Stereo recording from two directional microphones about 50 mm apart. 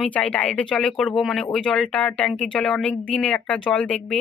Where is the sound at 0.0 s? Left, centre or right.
Left.